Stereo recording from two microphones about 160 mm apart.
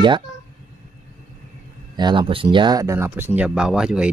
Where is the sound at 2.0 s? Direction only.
30° right (ahead or behind).